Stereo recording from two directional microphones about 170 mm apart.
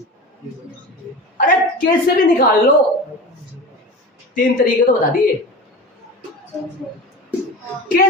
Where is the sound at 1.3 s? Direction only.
55° left (ahead or behind).